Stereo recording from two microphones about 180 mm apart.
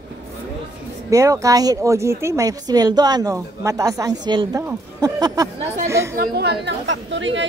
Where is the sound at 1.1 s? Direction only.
20° right (ahead or behind).